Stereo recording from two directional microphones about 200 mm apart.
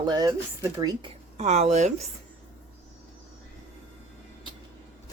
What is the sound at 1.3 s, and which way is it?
Speech, 35° right (ahead or behind).